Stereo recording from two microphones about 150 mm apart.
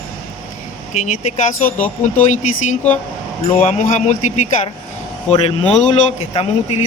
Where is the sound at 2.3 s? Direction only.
55° left (ahead or behind).